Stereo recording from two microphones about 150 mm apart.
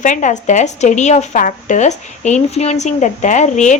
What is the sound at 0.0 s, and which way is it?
Speech, 55° left (ahead or behind).